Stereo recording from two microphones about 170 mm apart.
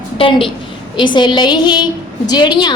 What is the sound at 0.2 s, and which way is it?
A woman's voice, 30° left (ahead or behind).